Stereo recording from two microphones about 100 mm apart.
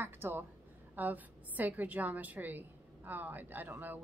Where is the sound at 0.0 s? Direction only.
20° right (ahead or behind).